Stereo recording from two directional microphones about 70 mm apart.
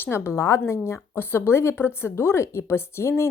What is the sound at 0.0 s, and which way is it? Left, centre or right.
Speech, left.